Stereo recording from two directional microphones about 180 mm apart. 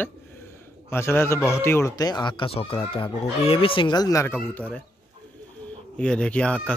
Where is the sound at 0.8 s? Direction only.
15° left (ahead or behind).